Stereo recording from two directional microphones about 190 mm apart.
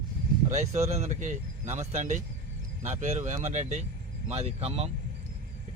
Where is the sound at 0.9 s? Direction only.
35° right (ahead or behind).